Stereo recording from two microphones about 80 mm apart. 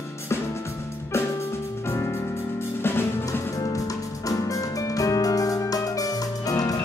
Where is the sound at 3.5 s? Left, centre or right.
Left.